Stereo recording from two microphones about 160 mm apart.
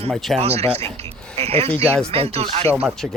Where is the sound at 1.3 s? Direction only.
40° right (ahead or behind).